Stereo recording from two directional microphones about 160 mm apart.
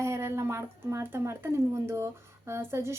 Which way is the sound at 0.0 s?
15° right (ahead or behind).